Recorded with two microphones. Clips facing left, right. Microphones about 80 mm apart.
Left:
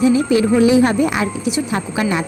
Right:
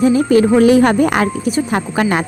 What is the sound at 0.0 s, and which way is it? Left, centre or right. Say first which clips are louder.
A woman's voice: right 3 dB; right.